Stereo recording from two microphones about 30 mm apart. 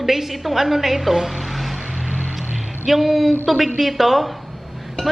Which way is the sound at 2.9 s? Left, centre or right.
Centre.